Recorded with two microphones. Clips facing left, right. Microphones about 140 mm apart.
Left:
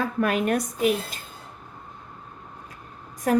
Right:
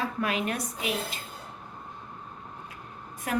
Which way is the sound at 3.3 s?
40° left (ahead or behind).